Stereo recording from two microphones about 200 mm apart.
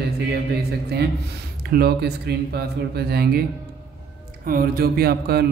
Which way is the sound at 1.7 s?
50° right (ahead or behind).